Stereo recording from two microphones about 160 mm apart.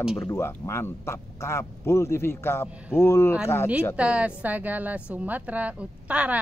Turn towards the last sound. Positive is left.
turn(degrees=-10)  # may be behind; listen again after turning